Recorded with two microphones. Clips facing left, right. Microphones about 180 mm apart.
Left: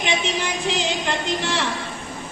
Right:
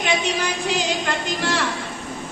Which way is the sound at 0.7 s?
25° left (ahead or behind).